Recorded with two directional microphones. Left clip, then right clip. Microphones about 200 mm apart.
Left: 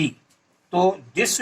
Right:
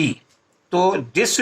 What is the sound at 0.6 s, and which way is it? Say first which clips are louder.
Speech: right 2 dB; 15° right (ahead or behind).